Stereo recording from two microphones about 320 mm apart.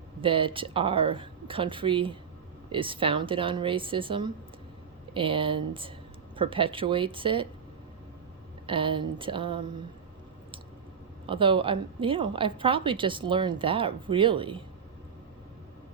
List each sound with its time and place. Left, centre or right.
0.2 s a woman's voice: centre
8.6 s a woman's voice: centre
11.3 s a woman's voice: centre